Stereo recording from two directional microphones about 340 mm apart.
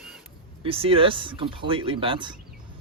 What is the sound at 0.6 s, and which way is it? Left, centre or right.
A man's voice, centre.